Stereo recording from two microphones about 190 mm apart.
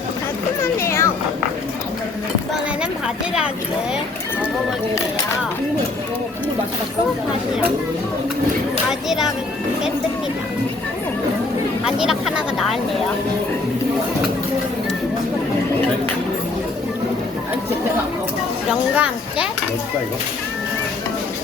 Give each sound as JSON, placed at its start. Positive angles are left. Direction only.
{"t": 0.6, "sound": "children playing", "side_deg": 15}
{"t": 8.9, "sound": "speech", "side_deg": 0}
{"t": 11.9, "sound": "speech", "side_deg": 0}
{"t": 18.7, "sound": "speech", "side_deg": -5}